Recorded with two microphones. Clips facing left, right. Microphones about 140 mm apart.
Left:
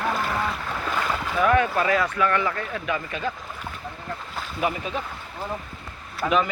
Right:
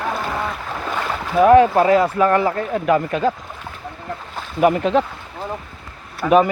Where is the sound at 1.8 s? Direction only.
30° right (ahead or behind).